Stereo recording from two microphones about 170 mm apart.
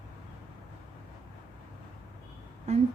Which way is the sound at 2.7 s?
40° right (ahead or behind).